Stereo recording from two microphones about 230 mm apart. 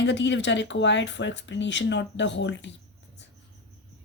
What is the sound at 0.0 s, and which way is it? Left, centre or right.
Speech, left.